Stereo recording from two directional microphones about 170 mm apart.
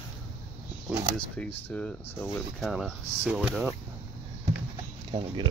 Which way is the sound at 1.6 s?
10° left (ahead or behind).